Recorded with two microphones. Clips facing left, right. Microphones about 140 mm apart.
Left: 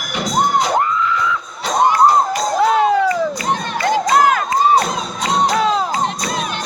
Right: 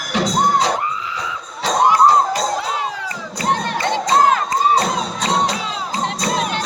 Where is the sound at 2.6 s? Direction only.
55° left (ahead or behind).